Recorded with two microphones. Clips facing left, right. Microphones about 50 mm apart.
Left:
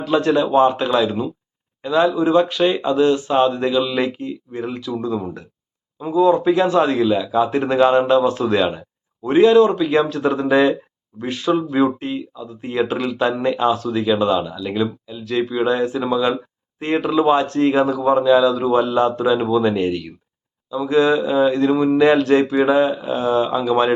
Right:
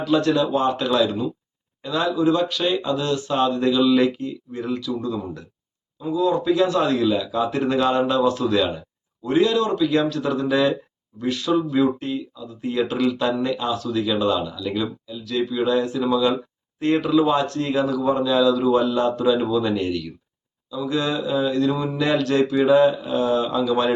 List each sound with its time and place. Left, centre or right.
0.0 s speech: left
17.5 s speech: left